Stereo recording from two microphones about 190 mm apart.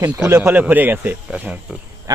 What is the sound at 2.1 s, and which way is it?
Insect, 20° right (ahead or behind).